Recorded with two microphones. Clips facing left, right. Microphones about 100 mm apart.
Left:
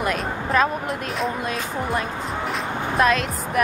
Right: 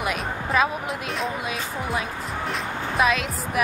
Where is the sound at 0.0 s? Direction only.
5° right (ahead or behind).